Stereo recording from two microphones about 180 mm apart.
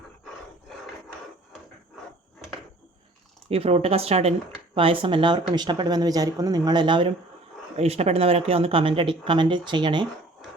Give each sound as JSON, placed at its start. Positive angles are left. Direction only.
{"t": 3.5, "sound": "speech", "side_deg": -30}